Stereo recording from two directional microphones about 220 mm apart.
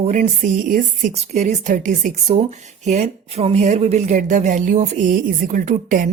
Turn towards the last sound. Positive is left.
turn(degrees=-35)  # may be behind; listen again after turning